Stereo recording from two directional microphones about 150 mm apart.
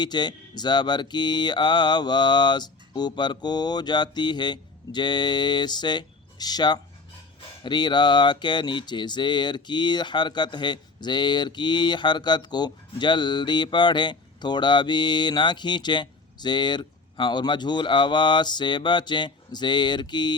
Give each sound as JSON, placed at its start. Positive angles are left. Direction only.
{"t": 0.0, "sound": "speech", "side_deg": 30}